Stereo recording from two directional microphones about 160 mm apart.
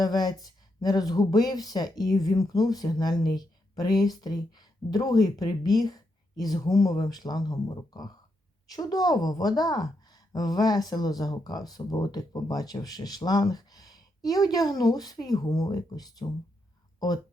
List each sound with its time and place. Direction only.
0.0 s a woman's voice: 25° left (ahead or behind)